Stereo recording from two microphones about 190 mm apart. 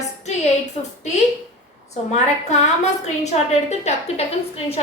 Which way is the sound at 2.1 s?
35° left (ahead or behind).